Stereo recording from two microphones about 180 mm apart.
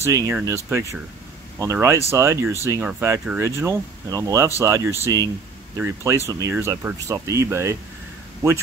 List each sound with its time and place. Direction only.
0.0 s speech: 15° right (ahead or behind)
1.6 s speech: 15° right (ahead or behind)